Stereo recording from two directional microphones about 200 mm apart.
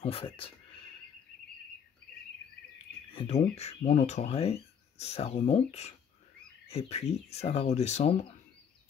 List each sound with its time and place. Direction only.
0.0 s speech: 30° left (ahead or behind)
3.1 s speech: 30° left (ahead or behind)